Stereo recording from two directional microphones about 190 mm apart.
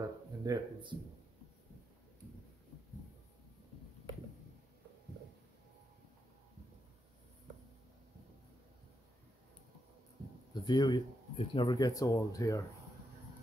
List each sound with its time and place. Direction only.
0.4 s speech: 20° right (ahead or behind)
10.5 s speech: 25° left (ahead or behind)